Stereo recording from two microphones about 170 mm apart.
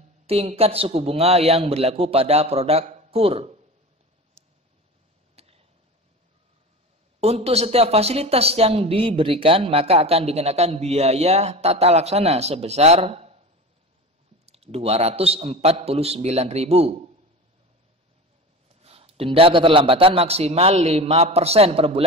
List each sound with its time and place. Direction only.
0.3 s speech: 35° right (ahead or behind)
4.4 s a sound: 40° right (ahead or behind)
7.2 s speech: 35° right (ahead or behind)
14.4 s speech: 35° right (ahead or behind)
18.8 s speech: 35° right (ahead or behind)